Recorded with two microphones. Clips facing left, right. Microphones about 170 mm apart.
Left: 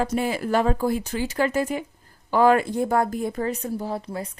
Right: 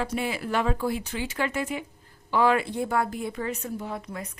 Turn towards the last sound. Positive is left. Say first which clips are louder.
# left 5 dB
turn(degrees=30)  # may be behind; listen again after turning